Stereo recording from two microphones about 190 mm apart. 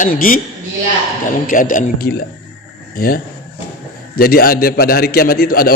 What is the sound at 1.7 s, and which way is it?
Speech, 50° left (ahead or behind).